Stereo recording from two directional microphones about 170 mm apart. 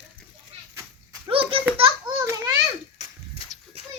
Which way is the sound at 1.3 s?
35° right (ahead or behind).